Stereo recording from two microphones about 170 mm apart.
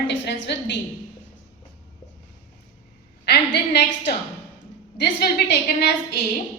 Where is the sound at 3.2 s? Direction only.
80° left.